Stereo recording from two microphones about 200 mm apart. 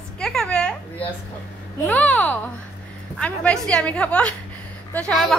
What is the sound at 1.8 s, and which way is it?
A child's voice, 5° left (ahead or behind).